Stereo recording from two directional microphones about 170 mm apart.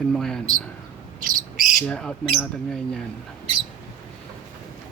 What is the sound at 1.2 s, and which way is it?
Bird, 50° right (ahead or behind).